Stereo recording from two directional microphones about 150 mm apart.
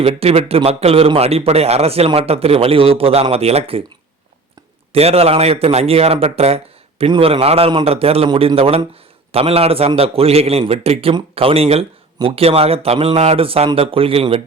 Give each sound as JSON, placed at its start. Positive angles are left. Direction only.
{"t": 0.0, "sound": "a man's voice", "side_deg": -40}